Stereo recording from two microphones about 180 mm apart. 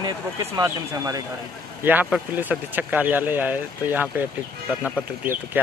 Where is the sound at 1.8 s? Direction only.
10° right (ahead or behind).